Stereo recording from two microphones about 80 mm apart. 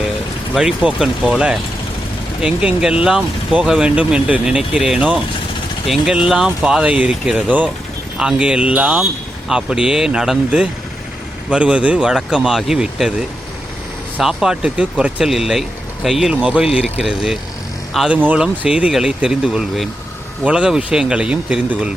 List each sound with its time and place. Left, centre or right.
0.5 s speech: centre
6.1 s speech: centre
16.3 s speech: centre
17.0 s speech: centre
18.1 s speech: right; by 19.9 s centre
20.4 s speech: centre